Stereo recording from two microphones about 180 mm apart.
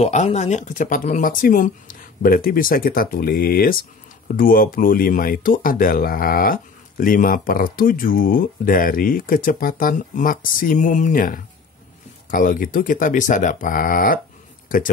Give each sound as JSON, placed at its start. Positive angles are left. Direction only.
{"t": 0.0, "sound": "speech", "side_deg": 40}